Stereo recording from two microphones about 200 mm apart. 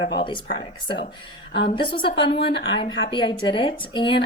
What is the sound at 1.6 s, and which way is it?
A woman's voice, 25° left (ahead or behind).